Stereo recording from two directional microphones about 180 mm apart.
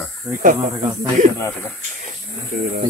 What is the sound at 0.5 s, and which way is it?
Speech, 20° right (ahead or behind).